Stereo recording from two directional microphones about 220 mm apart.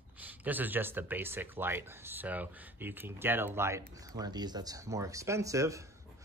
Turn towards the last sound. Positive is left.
turn(degrees=-15)  # may be behind; listen again after turning